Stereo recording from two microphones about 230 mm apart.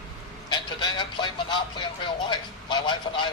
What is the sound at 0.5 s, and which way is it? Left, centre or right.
Speech, centre.